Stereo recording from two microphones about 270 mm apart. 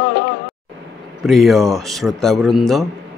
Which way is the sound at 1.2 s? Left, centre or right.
Centre.